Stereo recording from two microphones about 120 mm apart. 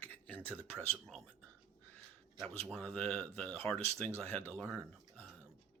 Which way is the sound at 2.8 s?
10° left (ahead or behind).